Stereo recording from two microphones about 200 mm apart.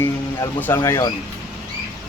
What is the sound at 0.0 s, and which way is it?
Speech, 15° left (ahead or behind).